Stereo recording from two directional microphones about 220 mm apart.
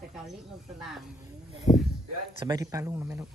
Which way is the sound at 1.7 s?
30° left (ahead or behind).